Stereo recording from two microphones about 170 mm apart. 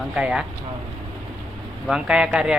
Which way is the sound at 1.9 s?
5° right (ahead or behind).